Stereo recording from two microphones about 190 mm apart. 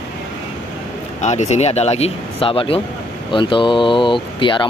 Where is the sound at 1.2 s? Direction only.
35° left (ahead or behind).